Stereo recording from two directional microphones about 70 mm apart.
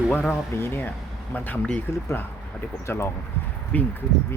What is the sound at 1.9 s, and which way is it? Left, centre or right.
Speech, left.